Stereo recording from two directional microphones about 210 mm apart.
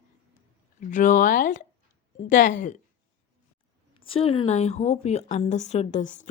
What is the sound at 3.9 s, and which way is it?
A woman's voice, 25° left (ahead or behind).